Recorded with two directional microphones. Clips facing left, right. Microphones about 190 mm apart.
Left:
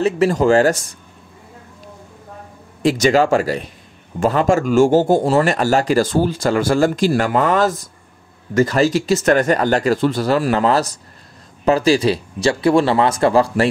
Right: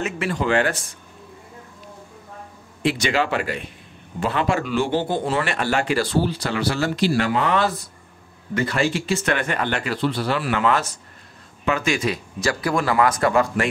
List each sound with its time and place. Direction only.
0.0 s speech: 40° left (ahead or behind)
2.8 s speech: 40° left (ahead or behind)